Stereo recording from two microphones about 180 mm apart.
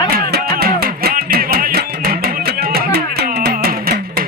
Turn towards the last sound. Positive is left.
turn(degrees=-55)  # may be behind; listen again after turning